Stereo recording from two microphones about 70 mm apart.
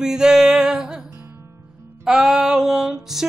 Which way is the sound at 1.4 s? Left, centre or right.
Right.